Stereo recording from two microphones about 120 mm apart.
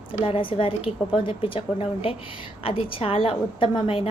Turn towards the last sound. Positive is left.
turn(degrees=50)  # may be behind; listen again after turning